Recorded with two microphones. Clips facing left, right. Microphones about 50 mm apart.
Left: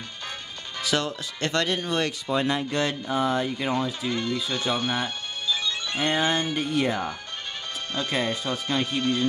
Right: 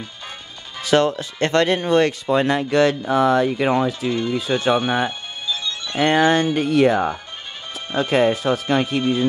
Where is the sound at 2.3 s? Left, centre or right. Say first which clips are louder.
Right 7 dB; right.